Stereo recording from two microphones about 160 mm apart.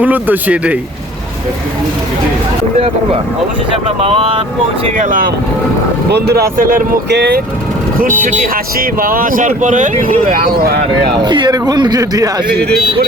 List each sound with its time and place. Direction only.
0.0 s speech: 10° right (ahead or behind)
4.0 s speech: 35° right (ahead or behind)
4.9 s speech: 55° right (ahead or behind)
6.1 s speech: 90° right
8.2 s speech: 60° right (ahead or behind)
11.2 s a man's voice: 30° right (ahead or behind)
12.5 s speech: 90° right